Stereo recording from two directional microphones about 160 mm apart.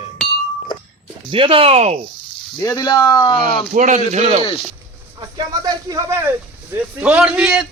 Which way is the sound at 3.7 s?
50° right (ahead or behind).